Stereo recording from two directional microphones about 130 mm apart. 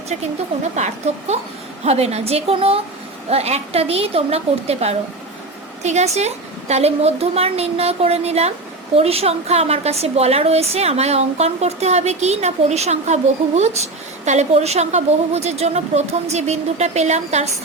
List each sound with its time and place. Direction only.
1.1 s a woman's voice: 55° right (ahead or behind)